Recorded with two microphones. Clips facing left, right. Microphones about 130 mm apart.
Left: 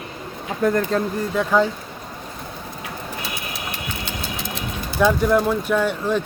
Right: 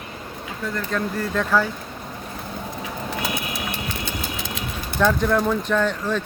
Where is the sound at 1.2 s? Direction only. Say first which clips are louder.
Left 2 dB; 15° left (ahead or behind).